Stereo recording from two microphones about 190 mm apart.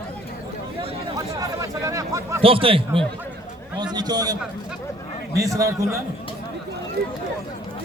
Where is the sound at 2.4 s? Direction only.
30° right (ahead or behind).